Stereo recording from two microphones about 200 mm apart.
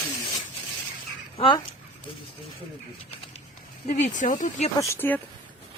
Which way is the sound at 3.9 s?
35° left (ahead or behind).